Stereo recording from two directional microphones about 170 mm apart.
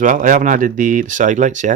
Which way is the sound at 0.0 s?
50° right (ahead or behind).